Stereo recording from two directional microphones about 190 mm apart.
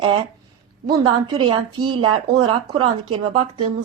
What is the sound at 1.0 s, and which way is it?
A woman's voice, 25° right (ahead or behind).